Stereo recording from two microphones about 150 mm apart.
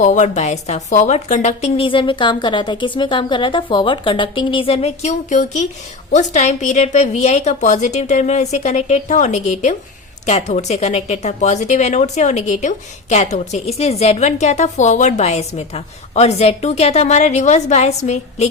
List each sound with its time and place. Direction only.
0.0 s a woman's voice: 55° left (ahead or behind)